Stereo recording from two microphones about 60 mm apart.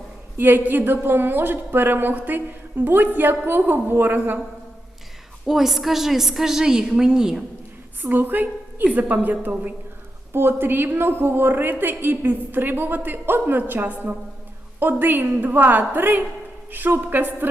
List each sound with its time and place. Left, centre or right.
0.3 s a woman's voice: right
5.5 s a woman's voice: centre
8.0 s a woman's voice: right
10.3 s a woman's voice: right